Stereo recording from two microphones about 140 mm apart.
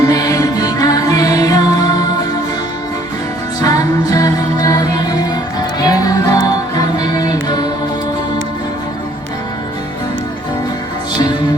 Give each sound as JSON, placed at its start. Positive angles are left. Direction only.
{"t": 0.0, "sound": "music", "side_deg": 25}
{"t": 3.6, "sound": "music", "side_deg": 30}